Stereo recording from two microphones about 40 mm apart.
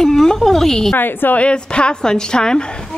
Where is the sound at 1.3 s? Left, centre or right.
Left.